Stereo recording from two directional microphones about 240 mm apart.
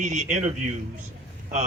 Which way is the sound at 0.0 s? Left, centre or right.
Right.